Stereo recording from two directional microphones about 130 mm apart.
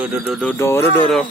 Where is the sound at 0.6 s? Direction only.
20° left (ahead or behind).